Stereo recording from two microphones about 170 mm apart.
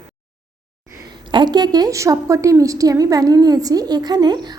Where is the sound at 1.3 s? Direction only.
25° right (ahead or behind).